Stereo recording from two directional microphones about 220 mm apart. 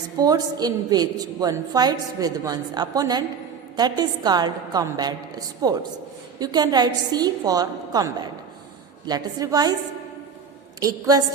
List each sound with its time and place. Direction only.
0.2 s a woman's voice: 15° right (ahead or behind)
10.8 s a woman's voice: 15° right (ahead or behind)